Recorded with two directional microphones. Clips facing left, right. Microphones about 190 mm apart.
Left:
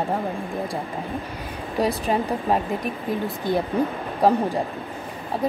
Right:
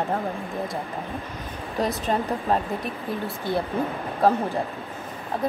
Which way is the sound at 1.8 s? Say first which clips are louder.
Left 2 dB; 10° left (ahead or behind).